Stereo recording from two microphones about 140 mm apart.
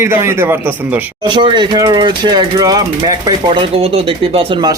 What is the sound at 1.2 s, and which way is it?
Speech, 35° right (ahead or behind).